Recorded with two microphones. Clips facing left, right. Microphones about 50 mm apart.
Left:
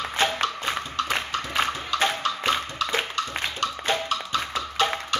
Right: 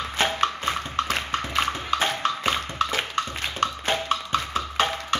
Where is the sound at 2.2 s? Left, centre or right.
Right.